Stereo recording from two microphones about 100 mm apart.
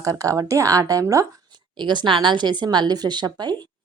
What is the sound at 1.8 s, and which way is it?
A woman's voice, 50° right (ahead or behind).